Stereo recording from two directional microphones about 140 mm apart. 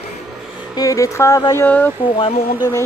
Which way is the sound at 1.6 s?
15° left (ahead or behind).